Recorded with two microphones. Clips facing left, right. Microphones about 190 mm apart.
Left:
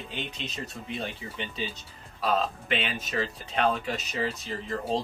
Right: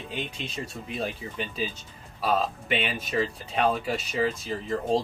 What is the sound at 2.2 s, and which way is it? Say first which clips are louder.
Speech: right 1 dB; 5° right (ahead or behind).